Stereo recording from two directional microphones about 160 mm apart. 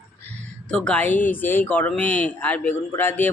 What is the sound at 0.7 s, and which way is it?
Speech, 5° left (ahead or behind).